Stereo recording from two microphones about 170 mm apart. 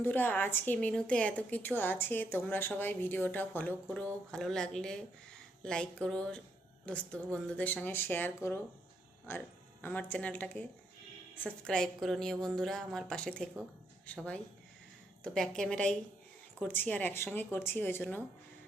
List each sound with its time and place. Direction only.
0.0 s a woman's voice: 10° left (ahead or behind)